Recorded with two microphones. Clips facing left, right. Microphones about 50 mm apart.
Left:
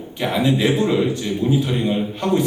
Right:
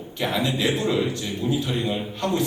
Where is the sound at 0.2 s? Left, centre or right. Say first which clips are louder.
Left 5 dB; centre.